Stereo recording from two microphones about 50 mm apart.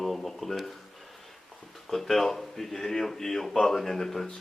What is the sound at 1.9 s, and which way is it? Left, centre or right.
Speech, centre.